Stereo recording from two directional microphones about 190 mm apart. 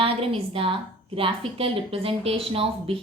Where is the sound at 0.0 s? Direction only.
30° right (ahead or behind).